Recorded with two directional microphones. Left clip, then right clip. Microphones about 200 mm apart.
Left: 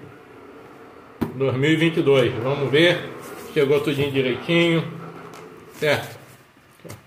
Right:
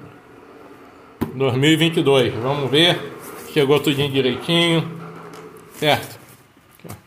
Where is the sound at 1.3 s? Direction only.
50° right (ahead or behind).